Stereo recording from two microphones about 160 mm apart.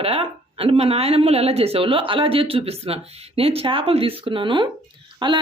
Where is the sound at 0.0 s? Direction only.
35° right (ahead or behind).